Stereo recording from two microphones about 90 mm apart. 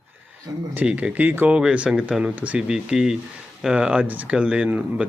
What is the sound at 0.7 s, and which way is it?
Speech, 15° right (ahead or behind).